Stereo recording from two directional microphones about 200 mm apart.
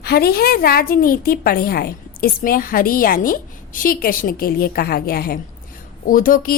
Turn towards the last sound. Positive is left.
turn(degrees=45)  # may be behind; listen again after turning